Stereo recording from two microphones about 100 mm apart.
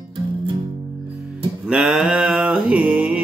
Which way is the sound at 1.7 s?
5° right (ahead or behind).